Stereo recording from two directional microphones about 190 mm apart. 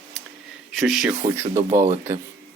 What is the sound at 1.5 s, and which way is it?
Speech, 40° right (ahead or behind).